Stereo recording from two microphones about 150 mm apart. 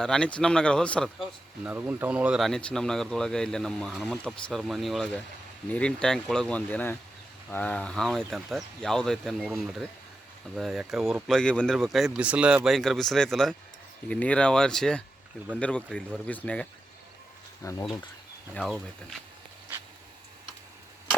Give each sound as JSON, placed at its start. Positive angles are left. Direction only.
{"t": 0.0, "sound": "speech", "side_deg": 5}
{"t": 1.6, "sound": "speech", "side_deg": -10}
{"t": 10.6, "sound": "speech", "side_deg": 0}
{"t": 17.6, "sound": "speech", "side_deg": 20}